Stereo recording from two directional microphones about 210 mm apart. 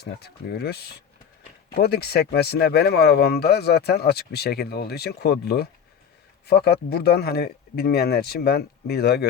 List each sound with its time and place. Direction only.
0.0 s speech: 50° left (ahead or behind)